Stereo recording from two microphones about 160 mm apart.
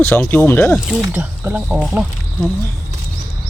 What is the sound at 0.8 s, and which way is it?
Speech, centre (ahead or behind).